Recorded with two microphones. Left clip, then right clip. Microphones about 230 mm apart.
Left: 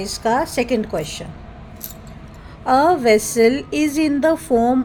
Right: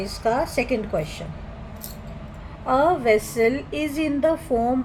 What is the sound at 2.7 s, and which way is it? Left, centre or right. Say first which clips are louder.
A woman's voice: left 5 dB; left.